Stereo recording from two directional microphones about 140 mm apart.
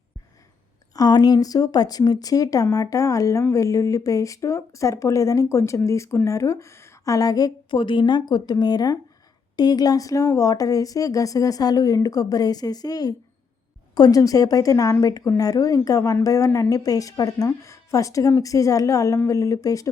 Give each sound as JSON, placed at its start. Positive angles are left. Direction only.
{"t": 0.9, "sound": "speech", "side_deg": 30}